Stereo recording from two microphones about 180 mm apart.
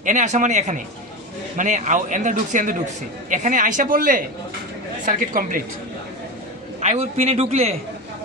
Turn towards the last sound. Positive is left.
turn(degrees=-35)  # may be behind; listen again after turning